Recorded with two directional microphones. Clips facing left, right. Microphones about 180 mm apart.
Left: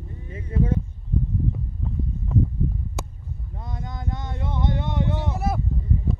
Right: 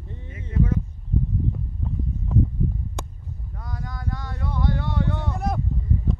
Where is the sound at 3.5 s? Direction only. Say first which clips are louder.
Left 1 dB; 25° left (ahead or behind).